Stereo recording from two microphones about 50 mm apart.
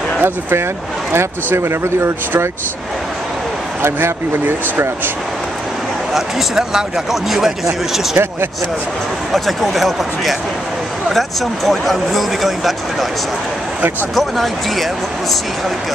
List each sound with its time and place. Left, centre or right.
0.2 s speech: right
3.8 s speech: right
6.1 s speech: centre
9.3 s speech: centre
14.1 s speech: centre